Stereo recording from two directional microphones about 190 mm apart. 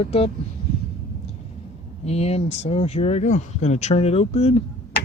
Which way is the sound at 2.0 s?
35° left (ahead or behind).